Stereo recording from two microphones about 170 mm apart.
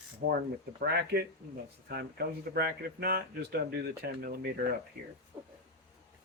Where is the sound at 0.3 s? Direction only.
70° right (ahead or behind).